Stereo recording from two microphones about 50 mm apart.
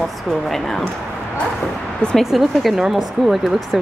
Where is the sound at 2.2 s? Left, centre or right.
Centre.